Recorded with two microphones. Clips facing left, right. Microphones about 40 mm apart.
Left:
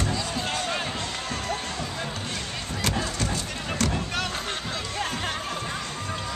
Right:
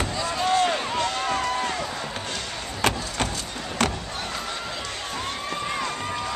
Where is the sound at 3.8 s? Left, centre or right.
Right.